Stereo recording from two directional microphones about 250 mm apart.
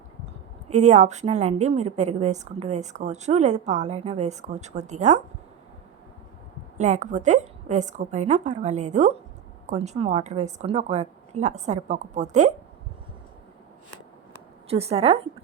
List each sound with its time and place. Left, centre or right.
0.7 s a woman's voice: right
6.7 s a woman's voice: right
14.7 s a woman's voice: right